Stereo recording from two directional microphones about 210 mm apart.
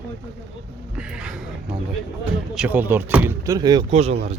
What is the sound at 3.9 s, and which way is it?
Speech, 30° right (ahead or behind).